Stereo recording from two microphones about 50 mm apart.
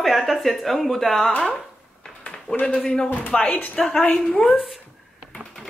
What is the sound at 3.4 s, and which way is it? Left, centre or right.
Speech, left.